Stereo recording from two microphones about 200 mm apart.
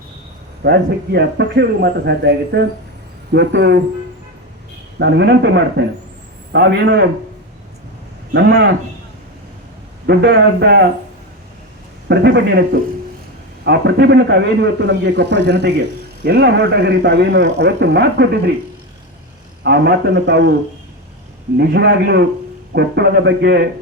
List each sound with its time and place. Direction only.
0.6 s speech: 55° right (ahead or behind)
4.9 s speech: 60° right (ahead or behind)
8.3 s speech: 60° right (ahead or behind)
10.1 s speech: 60° right (ahead or behind)
12.0 s speech: 55° right (ahead or behind)
19.6 s speech: 55° right (ahead or behind)
21.6 s speech: 55° right (ahead or behind)